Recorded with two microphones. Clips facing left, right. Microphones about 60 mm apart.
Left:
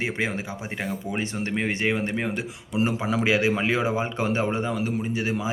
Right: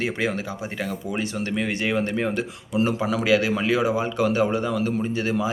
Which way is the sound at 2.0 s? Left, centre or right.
Centre.